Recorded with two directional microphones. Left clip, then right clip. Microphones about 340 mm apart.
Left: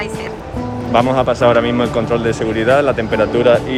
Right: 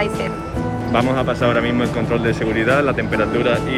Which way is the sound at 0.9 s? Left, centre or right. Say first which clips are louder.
Left 5 dB; centre.